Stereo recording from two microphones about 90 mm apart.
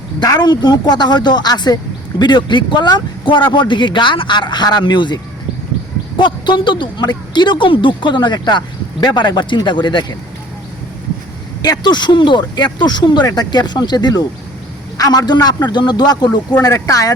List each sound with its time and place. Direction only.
0.3 s speech: 55° left (ahead or behind)
11.6 s speech: 50° left (ahead or behind)
16.6 s speech: 35° left (ahead or behind)